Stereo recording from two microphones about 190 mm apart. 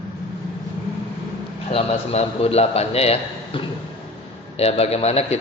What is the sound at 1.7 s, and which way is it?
Speech, 35° left (ahead or behind).